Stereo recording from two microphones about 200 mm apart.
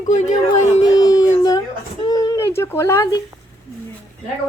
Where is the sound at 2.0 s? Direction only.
20° left (ahead or behind).